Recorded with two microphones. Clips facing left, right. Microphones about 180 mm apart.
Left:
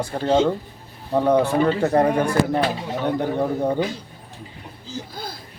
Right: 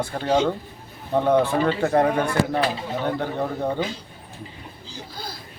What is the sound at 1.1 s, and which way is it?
Speech, 10° left (ahead or behind).